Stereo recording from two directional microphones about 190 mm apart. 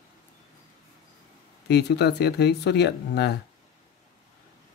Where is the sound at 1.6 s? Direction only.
60° left (ahead or behind).